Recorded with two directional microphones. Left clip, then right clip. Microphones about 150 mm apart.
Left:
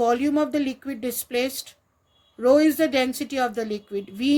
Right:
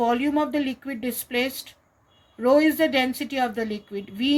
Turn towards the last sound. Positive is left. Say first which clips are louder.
# left 1 dB
turn(degrees=90)